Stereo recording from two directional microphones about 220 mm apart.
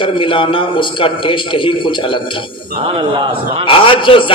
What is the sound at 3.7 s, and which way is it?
Speech, 25° left (ahead or behind).